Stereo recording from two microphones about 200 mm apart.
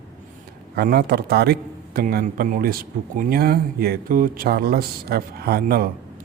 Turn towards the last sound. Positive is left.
turn(degrees=-50)  # may be behind; listen again after turning